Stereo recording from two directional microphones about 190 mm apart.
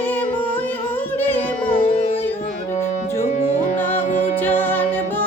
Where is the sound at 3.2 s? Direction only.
35° left (ahead or behind).